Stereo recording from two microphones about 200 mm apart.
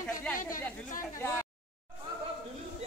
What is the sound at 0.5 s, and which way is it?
Speech, 40° left (ahead or behind).